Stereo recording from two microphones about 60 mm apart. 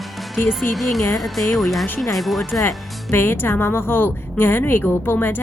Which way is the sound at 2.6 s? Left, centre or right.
Left.